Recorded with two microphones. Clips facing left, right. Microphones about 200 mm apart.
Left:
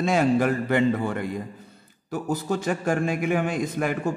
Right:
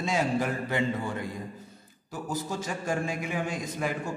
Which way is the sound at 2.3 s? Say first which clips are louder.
Left 7 dB; 60° left (ahead or behind).